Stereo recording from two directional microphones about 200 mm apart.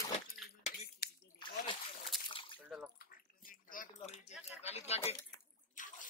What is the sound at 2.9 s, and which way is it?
Bathtub, 45° left (ahead or behind).